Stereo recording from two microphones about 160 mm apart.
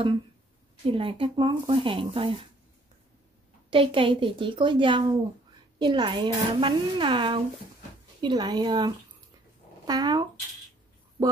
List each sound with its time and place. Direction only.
0.8 s speech: 35° right (ahead or behind)
3.7 s speech: 35° right (ahead or behind)